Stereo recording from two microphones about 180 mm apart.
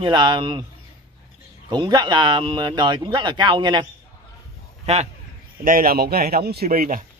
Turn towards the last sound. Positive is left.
turn(degrees=-50)  # may be behind; listen again after turning